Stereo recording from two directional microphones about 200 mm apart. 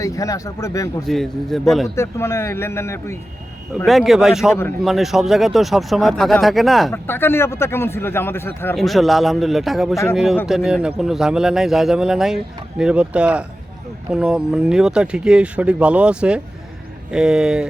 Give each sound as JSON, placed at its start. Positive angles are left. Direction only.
{"t": 0.0, "sound": "speech", "side_deg": 15}
{"t": 1.0, "sound": "speech", "side_deg": 0}
{"t": 2.0, "sound": "speech", "side_deg": 15}
{"t": 3.8, "sound": "speech", "side_deg": 0}
{"t": 6.9, "sound": "speech", "side_deg": 10}